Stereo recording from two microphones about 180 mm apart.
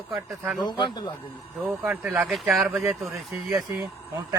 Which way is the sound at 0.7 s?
25° left (ahead or behind).